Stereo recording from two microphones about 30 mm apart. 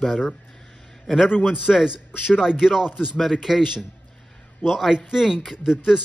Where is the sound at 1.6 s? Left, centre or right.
Centre.